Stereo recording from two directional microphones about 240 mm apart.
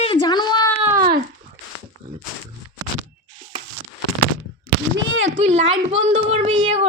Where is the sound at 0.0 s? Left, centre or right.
Centre.